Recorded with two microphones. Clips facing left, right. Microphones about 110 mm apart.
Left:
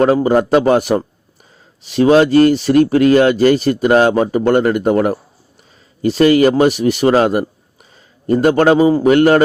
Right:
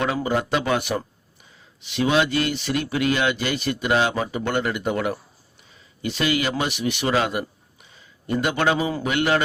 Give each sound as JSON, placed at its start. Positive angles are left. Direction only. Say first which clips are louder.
{"t": 0.0, "sound": "a man's voice", "louder": "left 11 dB", "side_deg": 40}